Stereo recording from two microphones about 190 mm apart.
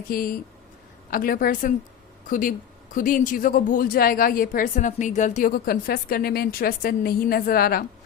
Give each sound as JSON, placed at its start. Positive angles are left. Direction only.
{"t": 0.1, "sound": "speech", "side_deg": 50}